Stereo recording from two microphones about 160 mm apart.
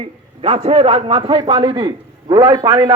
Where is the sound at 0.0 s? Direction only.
35° right (ahead or behind).